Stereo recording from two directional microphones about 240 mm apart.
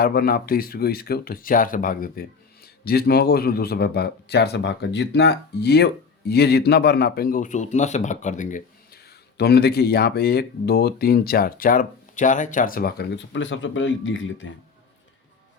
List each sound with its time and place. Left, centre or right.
0.0 s a man's voice: left